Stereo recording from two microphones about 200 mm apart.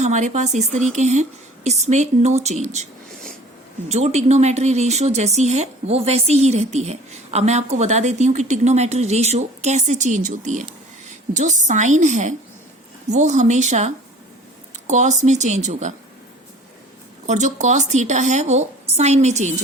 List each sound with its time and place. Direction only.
0.0 s speech: 35° right (ahead or behind)
3.8 s speech: 35° right (ahead or behind)
17.2 s speech: 35° right (ahead or behind)